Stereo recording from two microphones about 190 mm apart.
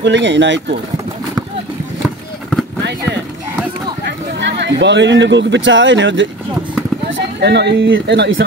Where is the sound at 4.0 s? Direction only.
65° right (ahead or behind).